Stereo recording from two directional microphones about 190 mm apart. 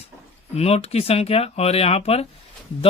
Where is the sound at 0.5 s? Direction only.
30° left (ahead or behind).